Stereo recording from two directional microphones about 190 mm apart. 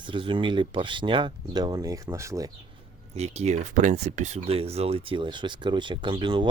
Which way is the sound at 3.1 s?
35° right (ahead or behind).